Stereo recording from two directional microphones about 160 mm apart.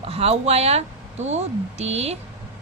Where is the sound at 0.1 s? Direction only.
40° right (ahead or behind).